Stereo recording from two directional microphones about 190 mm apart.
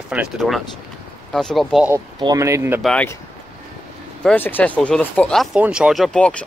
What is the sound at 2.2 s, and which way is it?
Speech, 20° right (ahead or behind).